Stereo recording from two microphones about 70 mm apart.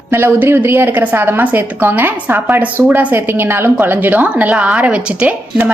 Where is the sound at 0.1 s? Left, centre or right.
Right.